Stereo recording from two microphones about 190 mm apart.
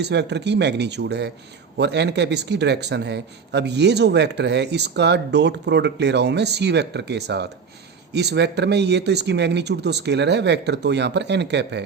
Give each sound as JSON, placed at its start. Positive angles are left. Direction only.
{"t": 0.0, "sound": "speech", "side_deg": -65}